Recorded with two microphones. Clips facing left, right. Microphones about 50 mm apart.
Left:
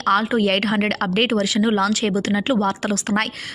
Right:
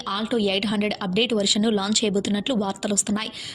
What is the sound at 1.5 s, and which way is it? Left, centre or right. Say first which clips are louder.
A woman's voice: left 3 dB; left.